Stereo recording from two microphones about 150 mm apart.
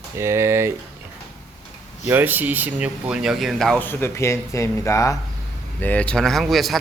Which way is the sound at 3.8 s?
15° left (ahead or behind).